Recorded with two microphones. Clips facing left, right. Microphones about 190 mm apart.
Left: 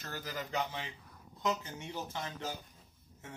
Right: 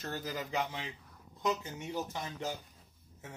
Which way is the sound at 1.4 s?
15° right (ahead or behind).